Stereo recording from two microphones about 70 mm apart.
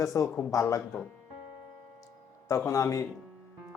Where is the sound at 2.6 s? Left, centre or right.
Left.